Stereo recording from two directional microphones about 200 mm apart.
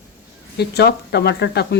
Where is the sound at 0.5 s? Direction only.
55° left (ahead or behind).